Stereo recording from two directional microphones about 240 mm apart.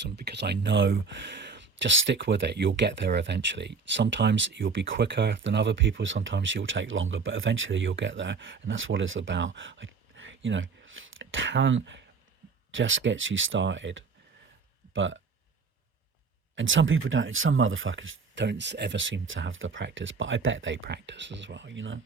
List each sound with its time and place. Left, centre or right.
0.0 s speech: right
16.6 s speech: right